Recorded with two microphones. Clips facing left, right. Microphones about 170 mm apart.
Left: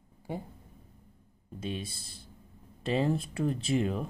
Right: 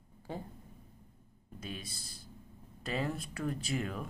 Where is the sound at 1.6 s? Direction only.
25° left (ahead or behind).